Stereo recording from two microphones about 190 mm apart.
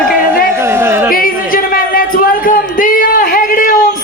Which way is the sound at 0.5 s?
10° right (ahead or behind).